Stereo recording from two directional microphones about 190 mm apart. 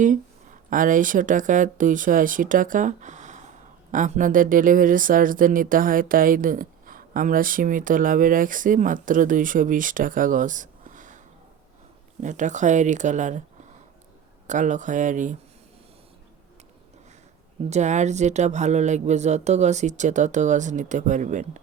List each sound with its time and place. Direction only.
0.7 s speech: 45° right (ahead or behind)
12.2 s speech: 40° right (ahead or behind)
14.4 s speech: 40° right (ahead or behind)
17.7 s speech: 40° right (ahead or behind)